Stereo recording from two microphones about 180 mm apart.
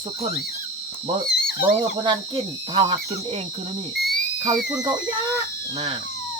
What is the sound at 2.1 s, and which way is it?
Speech, 25° right (ahead or behind).